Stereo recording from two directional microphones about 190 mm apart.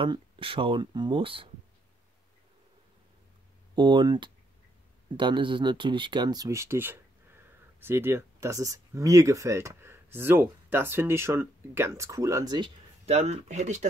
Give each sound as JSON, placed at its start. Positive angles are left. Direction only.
{"t": 0.0, "sound": "speech", "side_deg": -25}
{"t": 3.7, "sound": "speech", "side_deg": -25}